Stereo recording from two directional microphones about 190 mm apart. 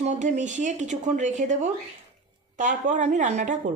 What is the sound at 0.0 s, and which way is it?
Speech, 40° right (ahead or behind).